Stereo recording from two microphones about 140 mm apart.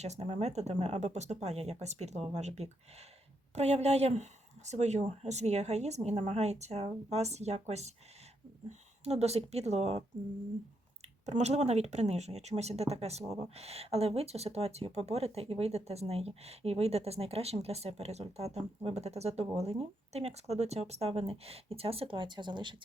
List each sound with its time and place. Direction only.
0.0 s speech: 50° right (ahead or behind)
9.0 s speech: 50° right (ahead or behind)
11.3 s speech: 50° right (ahead or behind); by 22.8 s 35° right (ahead or behind)